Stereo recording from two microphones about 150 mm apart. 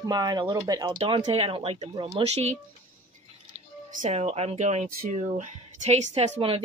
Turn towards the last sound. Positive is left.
turn(degrees=-40)  # may be behind; listen again after turning